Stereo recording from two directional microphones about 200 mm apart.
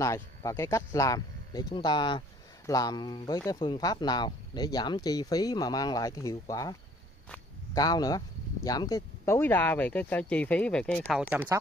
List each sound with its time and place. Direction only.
0.0 s speech: 15° left (ahead or behind)
11.2 s speech: 10° right (ahead or behind)